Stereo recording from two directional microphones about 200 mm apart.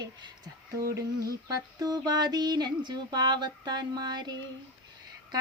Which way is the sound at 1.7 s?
20° right (ahead or behind).